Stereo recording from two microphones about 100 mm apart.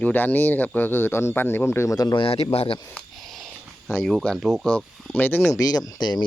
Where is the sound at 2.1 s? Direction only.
70° left (ahead or behind); by 2.7 s 85° left.